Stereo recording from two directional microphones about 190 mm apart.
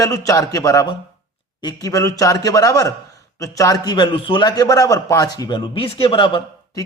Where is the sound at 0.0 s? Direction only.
15° left (ahead or behind).